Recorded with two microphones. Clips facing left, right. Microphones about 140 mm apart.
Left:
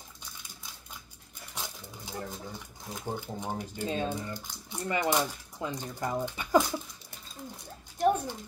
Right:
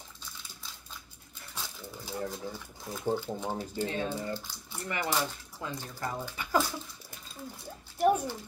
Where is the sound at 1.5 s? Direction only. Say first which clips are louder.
Even; 20° left (ahead or behind).